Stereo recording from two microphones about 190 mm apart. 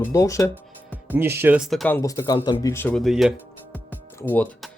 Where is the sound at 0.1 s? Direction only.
15° left (ahead or behind).